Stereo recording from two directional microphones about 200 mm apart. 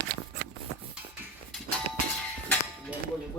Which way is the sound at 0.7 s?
90° right.